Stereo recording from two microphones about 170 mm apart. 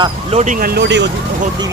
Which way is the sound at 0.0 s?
40° right (ahead or behind).